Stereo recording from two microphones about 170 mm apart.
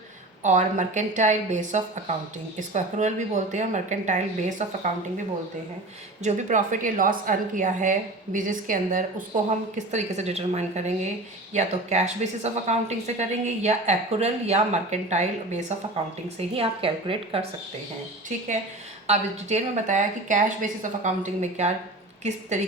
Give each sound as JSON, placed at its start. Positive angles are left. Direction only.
{"t": 0.4, "sound": "a woman's voice", "side_deg": -45}
{"t": 6.2, "sound": "a woman's voice", "side_deg": -45}
{"t": 19.0, "sound": "a woman's voice", "side_deg": -40}